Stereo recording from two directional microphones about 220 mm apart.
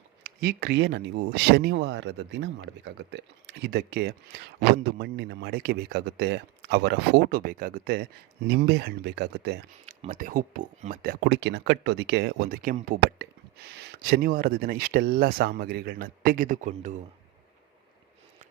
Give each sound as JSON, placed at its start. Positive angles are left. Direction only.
{"t": 0.2, "sound": "speech", "side_deg": -50}
{"t": 9.8, "sound": "speech", "side_deg": -35}